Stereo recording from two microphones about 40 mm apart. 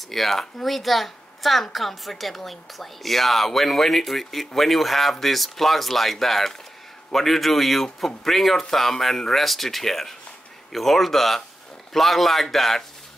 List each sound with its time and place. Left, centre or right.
0.1 s a woman's voice: centre